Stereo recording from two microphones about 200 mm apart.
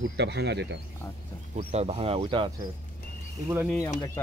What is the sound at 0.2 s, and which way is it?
Speech, 60° right (ahead or behind).